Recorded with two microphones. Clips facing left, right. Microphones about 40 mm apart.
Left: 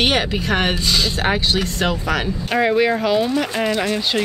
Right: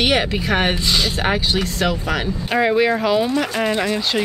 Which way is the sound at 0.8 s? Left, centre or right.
Right.